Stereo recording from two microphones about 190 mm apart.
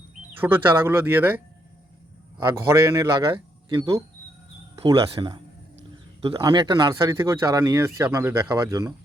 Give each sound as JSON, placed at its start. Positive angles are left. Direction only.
{"t": 0.3, "sound": "a man's voice", "side_deg": -10}
{"t": 2.4, "sound": "a man's voice", "side_deg": -15}
{"t": 5.1, "sound": "a man's voice", "side_deg": -25}